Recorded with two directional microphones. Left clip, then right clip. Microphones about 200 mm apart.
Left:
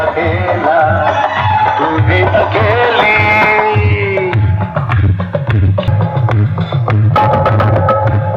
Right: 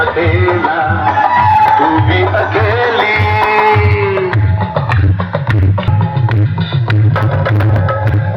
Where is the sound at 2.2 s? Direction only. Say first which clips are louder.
Left 2 dB; centre (ahead or behind).